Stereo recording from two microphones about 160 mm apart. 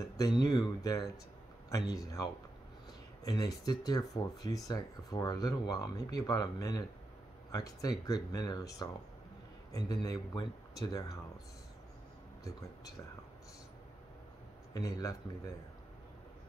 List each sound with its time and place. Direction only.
0.2 s speech: 25° left (ahead or behind)
14.7 s speech: 20° left (ahead or behind)